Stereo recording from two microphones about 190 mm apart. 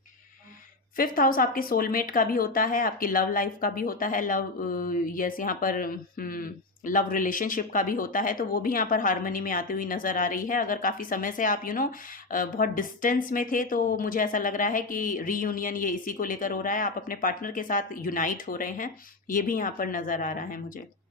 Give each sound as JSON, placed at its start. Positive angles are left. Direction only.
{"t": 0.9, "sound": "speech", "side_deg": 50}